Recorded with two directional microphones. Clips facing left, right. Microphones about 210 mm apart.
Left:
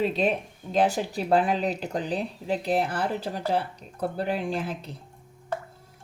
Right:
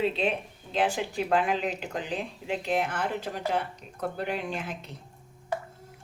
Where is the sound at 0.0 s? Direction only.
40° left (ahead or behind).